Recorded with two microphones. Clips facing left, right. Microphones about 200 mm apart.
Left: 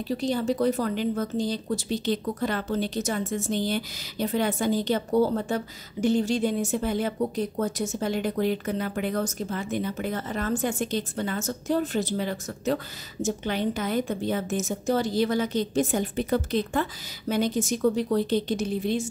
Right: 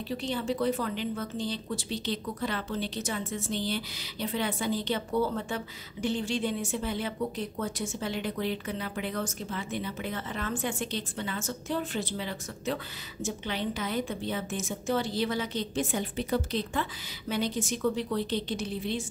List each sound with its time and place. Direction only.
0.1 s a woman's voice: 40° left (ahead or behind)